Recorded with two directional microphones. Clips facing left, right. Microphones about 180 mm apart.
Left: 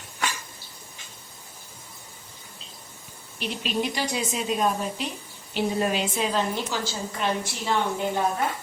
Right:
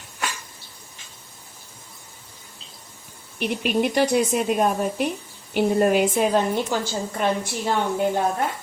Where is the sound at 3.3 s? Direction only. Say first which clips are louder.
Right 6 dB; 55° right (ahead or behind).